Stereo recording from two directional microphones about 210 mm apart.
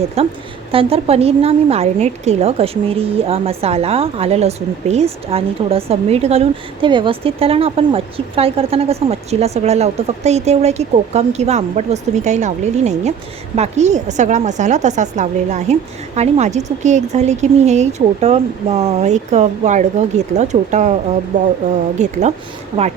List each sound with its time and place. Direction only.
0.2 s a woman's voice: 30° right (ahead or behind)